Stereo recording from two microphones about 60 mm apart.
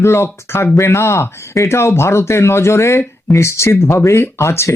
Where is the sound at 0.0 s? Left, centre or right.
Left.